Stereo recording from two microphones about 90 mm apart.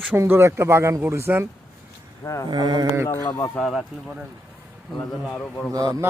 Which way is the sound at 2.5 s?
45° right (ahead or behind).